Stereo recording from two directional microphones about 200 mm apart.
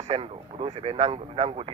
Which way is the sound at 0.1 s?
30° right (ahead or behind).